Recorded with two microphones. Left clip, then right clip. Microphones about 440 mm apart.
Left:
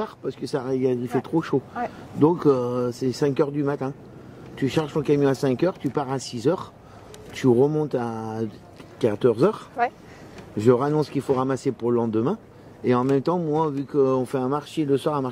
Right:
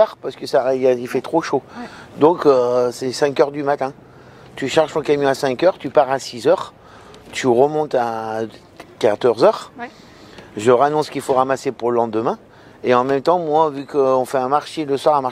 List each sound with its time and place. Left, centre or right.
0.0 s speech: right